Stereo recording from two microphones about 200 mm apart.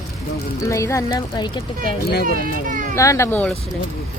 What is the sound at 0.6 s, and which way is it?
A woman's voice, 15° left (ahead or behind).